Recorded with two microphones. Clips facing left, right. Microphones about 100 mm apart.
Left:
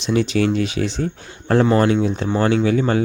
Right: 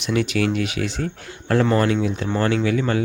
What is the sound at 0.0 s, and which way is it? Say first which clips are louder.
Speech: left 3 dB; 30° left (ahead or behind).